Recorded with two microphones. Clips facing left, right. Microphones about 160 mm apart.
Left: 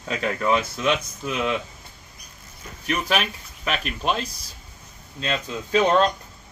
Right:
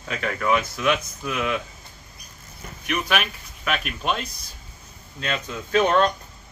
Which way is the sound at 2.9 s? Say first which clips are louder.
Left 1 dB; 30° left (ahead or behind).